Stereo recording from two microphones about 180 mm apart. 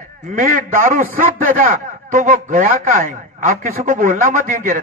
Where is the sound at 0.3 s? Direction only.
45° right (ahead or behind).